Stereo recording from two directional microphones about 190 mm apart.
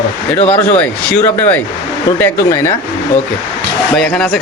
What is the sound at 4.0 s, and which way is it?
Speech, 5° left (ahead or behind).